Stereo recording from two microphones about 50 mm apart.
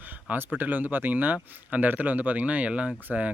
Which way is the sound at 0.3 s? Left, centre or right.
Right.